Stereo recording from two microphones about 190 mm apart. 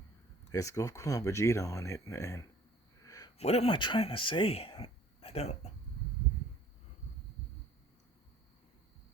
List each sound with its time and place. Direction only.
0.5 s speech: 15° left (ahead or behind)
3.0 s a sound: 15° left (ahead or behind)
3.3 s speech: 35° left (ahead or behind)